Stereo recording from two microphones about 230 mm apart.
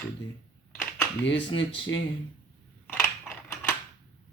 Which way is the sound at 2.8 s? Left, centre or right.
Centre.